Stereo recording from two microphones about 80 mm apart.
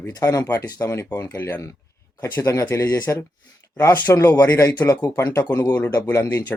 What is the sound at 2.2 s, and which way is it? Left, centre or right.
Speech, left.